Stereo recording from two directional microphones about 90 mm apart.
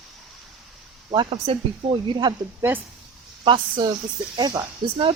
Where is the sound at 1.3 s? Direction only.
90° right; by 2.3 s 55° right (ahead or behind).